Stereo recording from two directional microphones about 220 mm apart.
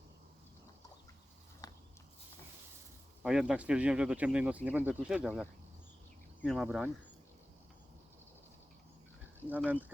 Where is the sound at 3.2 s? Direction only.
5° right (ahead or behind).